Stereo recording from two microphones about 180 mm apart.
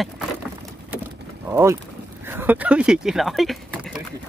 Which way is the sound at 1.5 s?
15° right (ahead or behind).